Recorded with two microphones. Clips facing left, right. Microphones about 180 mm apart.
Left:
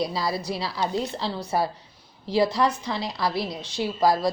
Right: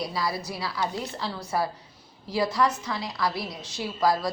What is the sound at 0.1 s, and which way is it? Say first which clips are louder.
A woman's voice: left 3 dB; 25° left (ahead or behind).